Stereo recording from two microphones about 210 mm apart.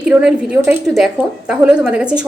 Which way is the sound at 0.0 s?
5° right (ahead or behind).